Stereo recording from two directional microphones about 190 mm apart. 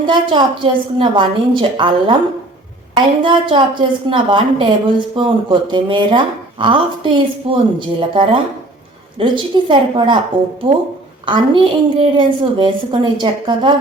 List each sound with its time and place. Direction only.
0.1 s speech: 25° right (ahead or behind)
11.3 s speech: 25° right (ahead or behind)